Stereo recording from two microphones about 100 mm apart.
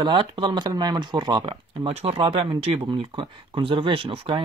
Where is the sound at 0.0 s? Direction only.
55° right (ahead or behind).